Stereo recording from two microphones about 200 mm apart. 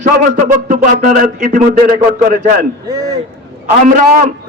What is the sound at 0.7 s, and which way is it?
A man's voice, 40° right (ahead or behind).